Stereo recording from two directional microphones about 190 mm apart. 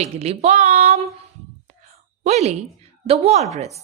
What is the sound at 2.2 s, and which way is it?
Speech, 35° right (ahead or behind).